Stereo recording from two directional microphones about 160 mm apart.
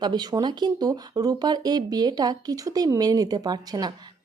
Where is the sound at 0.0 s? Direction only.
25° right (ahead or behind).